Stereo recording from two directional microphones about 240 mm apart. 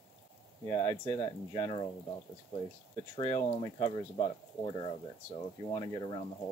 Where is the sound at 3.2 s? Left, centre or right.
Centre.